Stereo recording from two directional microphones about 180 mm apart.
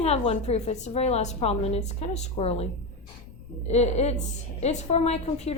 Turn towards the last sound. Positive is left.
turn(degrees=35)  # may be behind; listen again after turning